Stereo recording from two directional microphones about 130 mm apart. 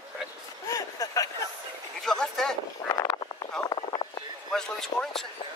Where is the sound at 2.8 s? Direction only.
30° left (ahead or behind).